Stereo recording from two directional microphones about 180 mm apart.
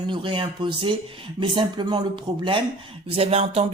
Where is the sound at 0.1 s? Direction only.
30° right (ahead or behind).